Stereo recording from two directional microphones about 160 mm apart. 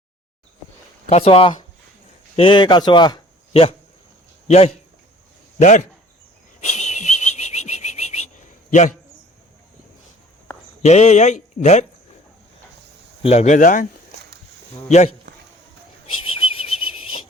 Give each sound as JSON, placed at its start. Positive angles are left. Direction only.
{"t": 1.1, "sound": "a man's voice", "side_deg": 40}
{"t": 6.6, "sound": "whistling", "side_deg": 45}
{"t": 10.8, "sound": "speech", "side_deg": 45}
{"t": 13.2, "sound": "speech", "side_deg": 45}
{"t": 14.8, "sound": "speech", "side_deg": 45}
{"t": 16.2, "sound": "a sound", "side_deg": 35}